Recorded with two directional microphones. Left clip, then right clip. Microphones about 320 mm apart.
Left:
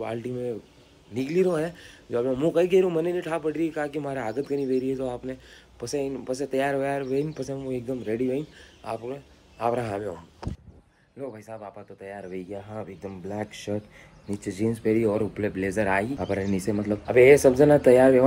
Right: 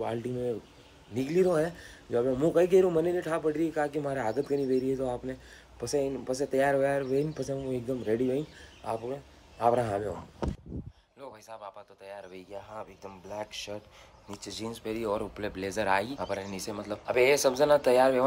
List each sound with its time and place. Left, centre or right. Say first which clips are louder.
0.0 s speech: left 2 dB; centre
11.1 s speech: left 7 dB; centre